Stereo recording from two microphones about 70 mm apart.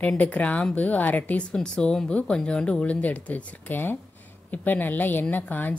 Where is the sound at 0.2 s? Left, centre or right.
Centre.